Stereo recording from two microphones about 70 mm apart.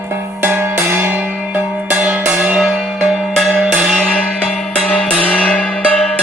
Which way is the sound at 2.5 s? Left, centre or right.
Centre.